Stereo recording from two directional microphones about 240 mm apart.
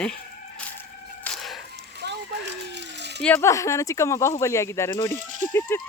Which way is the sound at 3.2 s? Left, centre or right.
Centre.